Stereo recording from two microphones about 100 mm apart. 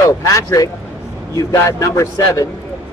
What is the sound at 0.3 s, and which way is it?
Speech, 35° left (ahead or behind).